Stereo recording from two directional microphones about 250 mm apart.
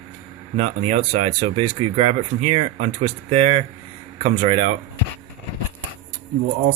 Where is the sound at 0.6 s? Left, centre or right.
Right.